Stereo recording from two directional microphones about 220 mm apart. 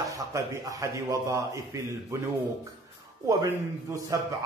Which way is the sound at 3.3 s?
15° right (ahead or behind).